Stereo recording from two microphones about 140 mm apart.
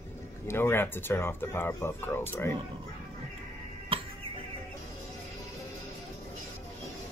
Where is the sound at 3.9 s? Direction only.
40° right (ahead or behind).